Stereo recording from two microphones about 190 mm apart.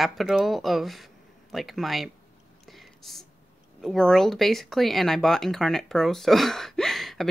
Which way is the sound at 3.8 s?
Centre (ahead or behind).